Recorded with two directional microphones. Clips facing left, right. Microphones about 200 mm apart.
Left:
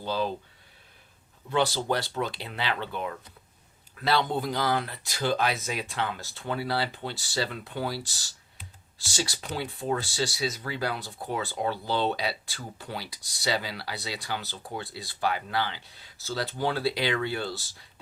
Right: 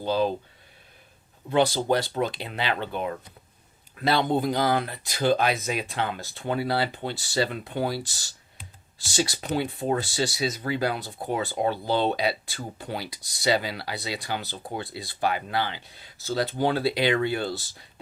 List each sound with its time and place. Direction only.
0.0 s speech: 15° right (ahead or behind)
1.5 s speech: 15° right (ahead or behind)